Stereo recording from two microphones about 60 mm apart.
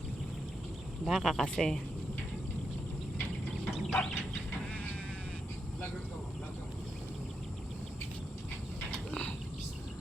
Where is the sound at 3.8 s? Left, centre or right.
Centre.